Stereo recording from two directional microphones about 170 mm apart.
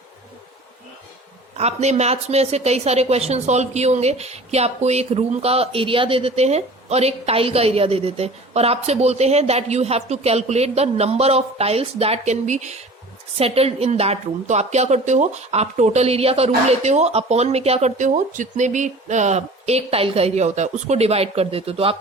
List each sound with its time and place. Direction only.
1.5 s speech: 40° right (ahead or behind)